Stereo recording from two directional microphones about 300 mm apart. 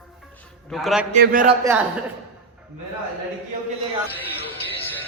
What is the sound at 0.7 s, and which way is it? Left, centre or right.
Speech, centre.